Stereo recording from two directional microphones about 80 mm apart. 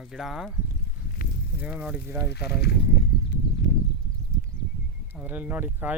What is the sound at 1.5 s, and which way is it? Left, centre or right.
Speech, centre.